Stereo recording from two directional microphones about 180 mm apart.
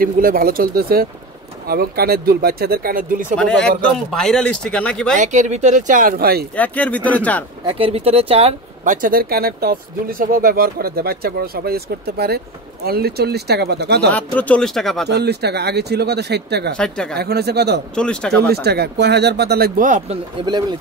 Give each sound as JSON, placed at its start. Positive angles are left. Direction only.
{"t": 0.0, "sound": "speech", "side_deg": -55}
{"t": 3.3, "sound": "speech", "side_deg": 5}
{"t": 5.1, "sound": "speech", "side_deg": -45}
{"t": 6.5, "sound": "speech", "side_deg": 10}
{"t": 7.6, "sound": "speech", "side_deg": -30}
{"t": 8.9, "sound": "speech", "side_deg": -50}
{"t": 14.1, "sound": "speech", "side_deg": 10}
{"t": 15.0, "sound": "speech", "side_deg": -65}
{"t": 16.7, "sound": "speech", "side_deg": 5}
{"t": 17.2, "sound": "speech", "side_deg": -65}
{"t": 17.9, "sound": "speech", "side_deg": 5}
{"t": 18.5, "sound": "speech", "side_deg": -65}
{"t": 19.8, "sound": "speech", "side_deg": -45}
{"t": 20.4, "sound": "speech", "side_deg": -30}